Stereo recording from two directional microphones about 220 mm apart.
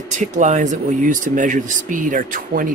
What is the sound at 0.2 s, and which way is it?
Speech, 35° right (ahead or behind).